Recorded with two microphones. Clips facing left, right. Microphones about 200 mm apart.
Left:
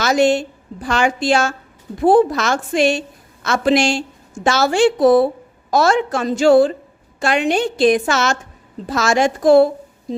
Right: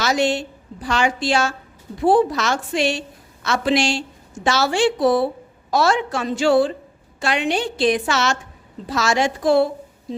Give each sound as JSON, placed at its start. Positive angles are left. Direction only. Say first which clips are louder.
{"t": 0.0, "sound": "a woman's voice", "louder": "left 5 dB", "side_deg": 50}